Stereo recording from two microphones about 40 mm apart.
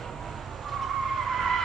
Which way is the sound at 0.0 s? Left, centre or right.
Centre.